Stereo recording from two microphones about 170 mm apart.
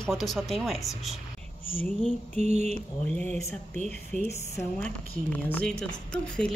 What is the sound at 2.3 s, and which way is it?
Mantra, 40° right (ahead or behind).